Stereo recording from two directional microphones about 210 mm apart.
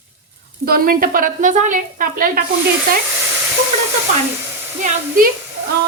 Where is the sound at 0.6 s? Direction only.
45° right (ahead or behind).